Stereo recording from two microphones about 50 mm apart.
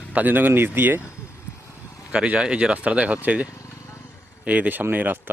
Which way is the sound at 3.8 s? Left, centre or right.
Left.